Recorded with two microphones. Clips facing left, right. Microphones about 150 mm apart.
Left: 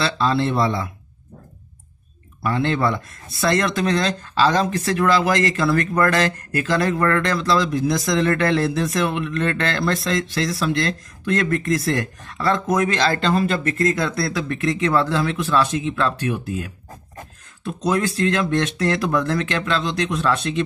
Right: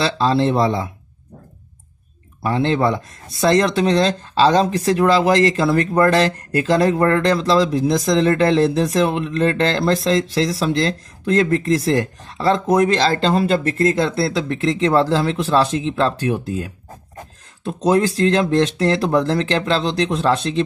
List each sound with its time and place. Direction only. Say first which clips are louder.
0.0 s speech: right 3 dB; 30° right (ahead or behind)
2.4 s speech: right 3 dB; 30° right (ahead or behind)